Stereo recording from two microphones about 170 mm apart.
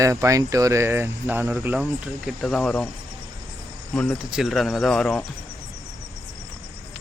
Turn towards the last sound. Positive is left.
turn(degrees=5)  # may be behind; listen again after turning